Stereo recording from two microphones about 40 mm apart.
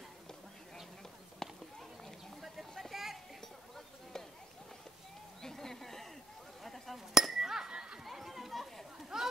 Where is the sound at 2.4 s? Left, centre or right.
Centre.